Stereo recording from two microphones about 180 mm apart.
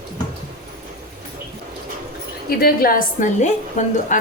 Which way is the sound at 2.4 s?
55° left (ahead or behind).